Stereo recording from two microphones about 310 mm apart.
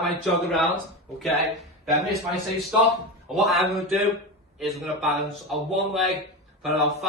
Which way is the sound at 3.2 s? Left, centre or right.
Centre.